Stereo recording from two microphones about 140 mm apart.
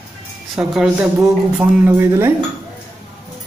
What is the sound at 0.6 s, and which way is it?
A man's voice, 5° right (ahead or behind).